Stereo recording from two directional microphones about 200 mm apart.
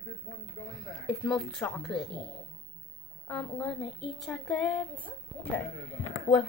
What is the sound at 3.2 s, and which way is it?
A woman's voice, 5° left (ahead or behind).